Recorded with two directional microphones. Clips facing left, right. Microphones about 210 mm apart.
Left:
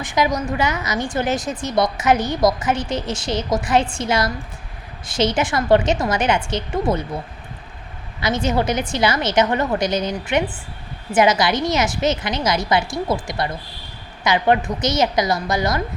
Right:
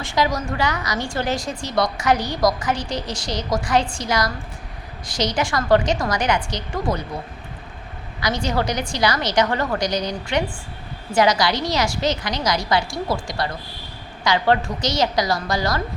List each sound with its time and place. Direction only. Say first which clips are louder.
0.0 s a woman's voice: left 2 dB; 20° left (ahead or behind)
8.2 s a woman's voice: left 3 dB; 20° left (ahead or behind)